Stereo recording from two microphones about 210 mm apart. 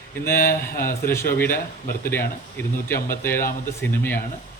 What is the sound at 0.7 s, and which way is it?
Speech, 45° left (ahead or behind).